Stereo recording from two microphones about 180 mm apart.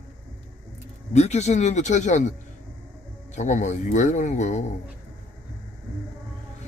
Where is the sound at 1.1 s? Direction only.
40° left (ahead or behind).